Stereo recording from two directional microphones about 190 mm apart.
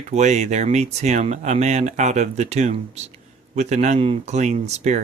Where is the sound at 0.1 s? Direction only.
35° right (ahead or behind).